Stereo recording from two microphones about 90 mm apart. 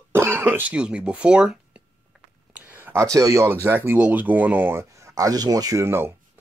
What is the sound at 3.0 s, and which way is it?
Speech, 35° right (ahead or behind).